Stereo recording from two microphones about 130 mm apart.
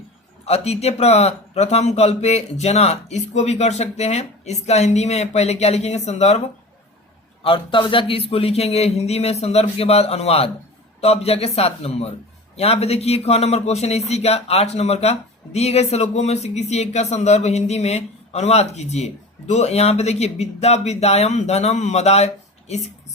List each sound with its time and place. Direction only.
0.4 s a man's voice: 55° left (ahead or behind)
7.4 s a man's voice: 40° left (ahead or behind)